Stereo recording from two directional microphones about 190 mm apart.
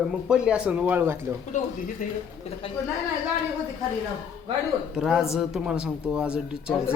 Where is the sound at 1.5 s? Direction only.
40° left (ahead or behind).